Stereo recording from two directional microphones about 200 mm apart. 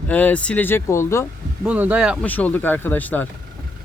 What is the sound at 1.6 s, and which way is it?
Speech, 5° right (ahead or behind).